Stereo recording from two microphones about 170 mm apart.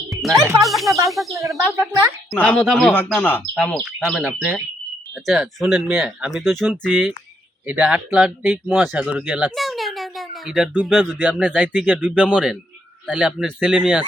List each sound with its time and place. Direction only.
0.1 s music: centre (ahead or behind)
0.6 s speech: centre (ahead or behind)
1.6 s speech: 15° right (ahead or behind)
2.3 s speech: 5° left (ahead or behind)
4.2 s speech: 10° right (ahead or behind)
6.7 s speech: 10° right (ahead or behind)
11.2 s speech: 10° right (ahead or behind)